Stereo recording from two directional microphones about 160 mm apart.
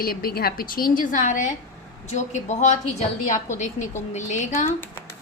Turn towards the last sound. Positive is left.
turn(degrees=50)  # may be behind; listen again after turning